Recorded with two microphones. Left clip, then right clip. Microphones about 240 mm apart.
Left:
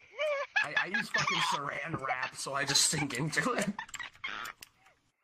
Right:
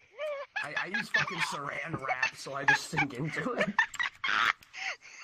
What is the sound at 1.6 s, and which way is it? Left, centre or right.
Speech, centre.